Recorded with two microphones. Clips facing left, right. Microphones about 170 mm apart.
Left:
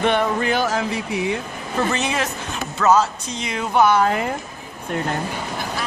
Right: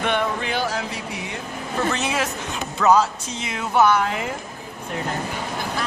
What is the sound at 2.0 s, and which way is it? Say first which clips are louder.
Speech: left 1 dB; 5° right (ahead or behind).